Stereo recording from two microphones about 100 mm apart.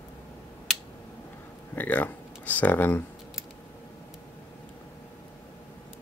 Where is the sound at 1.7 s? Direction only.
15° left (ahead or behind).